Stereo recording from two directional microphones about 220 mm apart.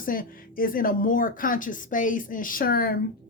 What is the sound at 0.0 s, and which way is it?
Speech, 40° left (ahead or behind).